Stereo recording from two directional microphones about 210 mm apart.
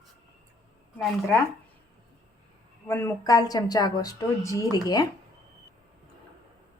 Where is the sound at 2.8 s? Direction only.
10° left (ahead or behind).